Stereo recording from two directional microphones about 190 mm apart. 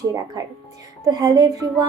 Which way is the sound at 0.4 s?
20° right (ahead or behind).